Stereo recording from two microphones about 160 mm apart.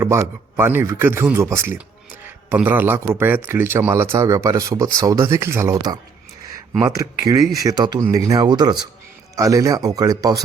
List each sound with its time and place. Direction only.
0.0 s a man's voice: 15° right (ahead or behind)